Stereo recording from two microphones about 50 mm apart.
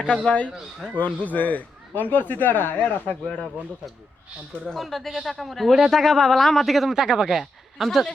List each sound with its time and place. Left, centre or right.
0.3 s speech: left
4.7 s speech: centre
7.3 s speech: centre